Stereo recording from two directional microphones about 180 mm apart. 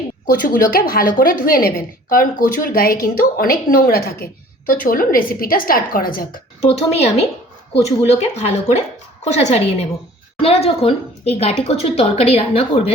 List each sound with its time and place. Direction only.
0.3 s speech: 50° left (ahead or behind)
6.7 s a woman's voice: 35° left (ahead or behind)